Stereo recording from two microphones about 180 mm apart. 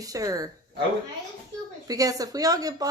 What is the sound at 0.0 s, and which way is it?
Speech, 20° right (ahead or behind).